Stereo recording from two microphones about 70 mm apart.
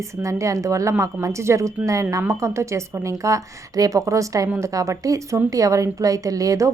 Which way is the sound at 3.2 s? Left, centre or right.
Right.